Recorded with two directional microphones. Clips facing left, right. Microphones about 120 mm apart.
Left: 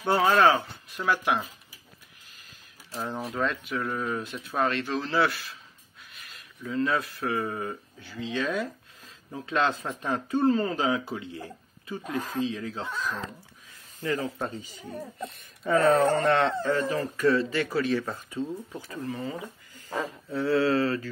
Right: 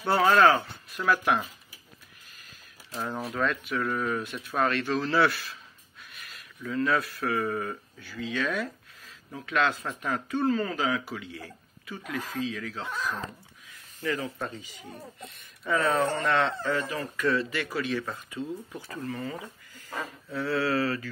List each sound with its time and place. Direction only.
0.2 s speech: centre (ahead or behind)
0.9 s speech: 20° left (ahead or behind)
2.9 s speech: 15° left (ahead or behind)
6.6 s speech: 25° left (ahead or behind)
14.0 s speech: 35° left (ahead or behind)
18.8 s speech: 20° left (ahead or behind)